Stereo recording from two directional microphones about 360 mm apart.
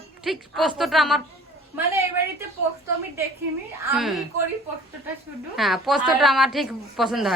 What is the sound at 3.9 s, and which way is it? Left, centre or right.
Speech, centre.